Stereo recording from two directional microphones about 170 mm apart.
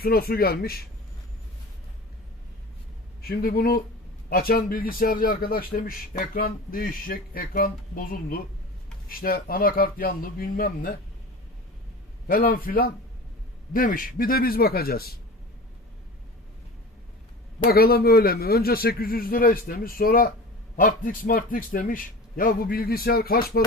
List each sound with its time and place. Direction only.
0.0 s a man's voice: 65° left (ahead or behind)
3.2 s a man's voice: 65° left (ahead or behind)
12.3 s a man's voice: 60° left (ahead or behind)
17.6 s a man's voice: 60° left (ahead or behind)